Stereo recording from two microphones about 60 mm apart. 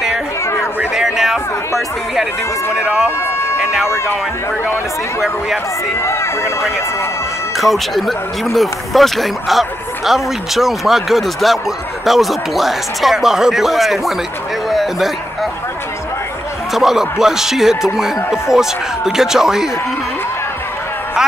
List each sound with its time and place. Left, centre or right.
0.9 s a sound: centre
2.7 s speech: centre
3.9 s speech: left
5.9 s speech: left
7.5 s speech: centre
16.7 s speech: centre